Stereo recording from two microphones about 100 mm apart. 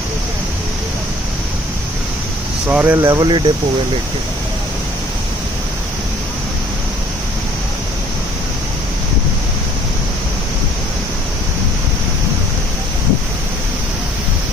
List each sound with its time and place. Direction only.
2.7 s speech: 20° right (ahead or behind)
3.0 s speech: 35° right (ahead or behind)
3.3 s speech: 50° right (ahead or behind)